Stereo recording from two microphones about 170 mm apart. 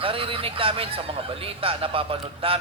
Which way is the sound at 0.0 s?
30° right (ahead or behind).